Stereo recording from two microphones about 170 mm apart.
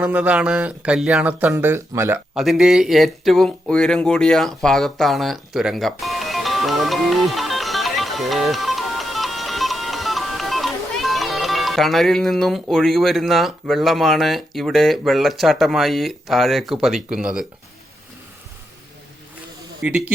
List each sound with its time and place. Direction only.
0.0 s speech: 5° right (ahead or behind)
2.3 s speech: centre (ahead or behind)
19.8 s speech: 5° right (ahead or behind)